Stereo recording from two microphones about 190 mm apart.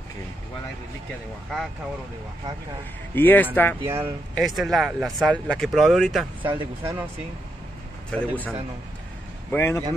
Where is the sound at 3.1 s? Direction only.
10° left (ahead or behind).